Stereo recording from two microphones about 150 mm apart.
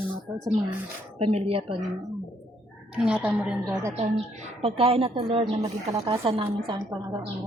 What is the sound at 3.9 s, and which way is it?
A woman's voice, 45° right (ahead or behind).